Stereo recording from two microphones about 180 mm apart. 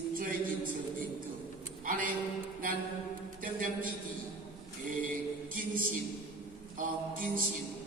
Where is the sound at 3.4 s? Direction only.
50° right (ahead or behind).